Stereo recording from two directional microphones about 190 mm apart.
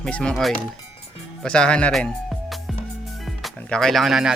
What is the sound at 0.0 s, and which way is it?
Speech, 5° left (ahead or behind).